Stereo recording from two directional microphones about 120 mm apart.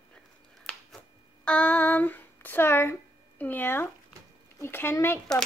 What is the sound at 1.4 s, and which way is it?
Speech, 10° left (ahead or behind).